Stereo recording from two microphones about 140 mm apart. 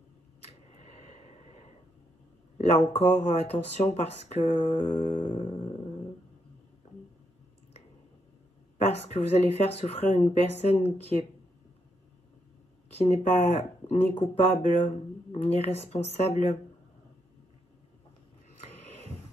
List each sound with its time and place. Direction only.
0.7 s vehicle: 55° left (ahead or behind)
2.5 s speech: 50° left (ahead or behind)
4.7 s a sound: 35° left (ahead or behind)
8.7 s speech: 50° left (ahead or behind)
12.9 s speech: 50° left (ahead or behind)